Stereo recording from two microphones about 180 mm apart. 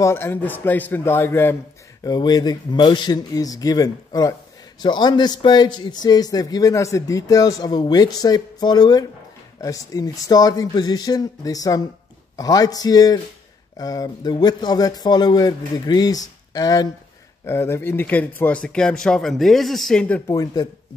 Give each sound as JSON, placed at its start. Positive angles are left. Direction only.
{"t": 0.0, "sound": "a man's voice", "side_deg": 15}